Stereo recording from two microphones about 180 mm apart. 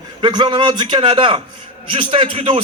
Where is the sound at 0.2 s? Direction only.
25° right (ahead or behind).